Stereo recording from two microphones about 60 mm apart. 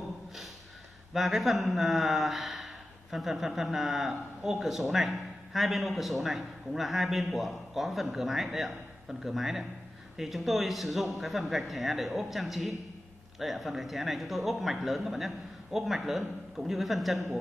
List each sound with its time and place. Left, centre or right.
1.1 s speech: centre